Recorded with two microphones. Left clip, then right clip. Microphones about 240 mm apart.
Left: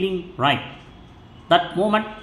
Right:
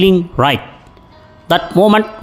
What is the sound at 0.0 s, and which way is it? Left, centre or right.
Speech, right.